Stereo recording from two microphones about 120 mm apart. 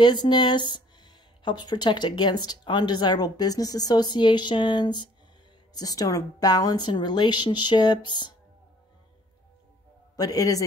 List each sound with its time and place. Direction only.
0.0 s speech: 35° left (ahead or behind)
10.1 s a man's voice: 30° left (ahead or behind)